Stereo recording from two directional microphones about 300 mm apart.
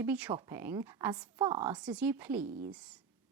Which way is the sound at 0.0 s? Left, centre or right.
Centre.